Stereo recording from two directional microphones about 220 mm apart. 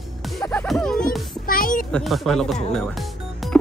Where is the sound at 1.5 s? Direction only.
40° left (ahead or behind).